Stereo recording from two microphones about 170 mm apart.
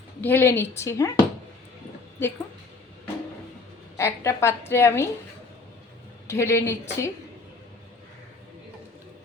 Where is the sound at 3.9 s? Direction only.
15° left (ahead or behind).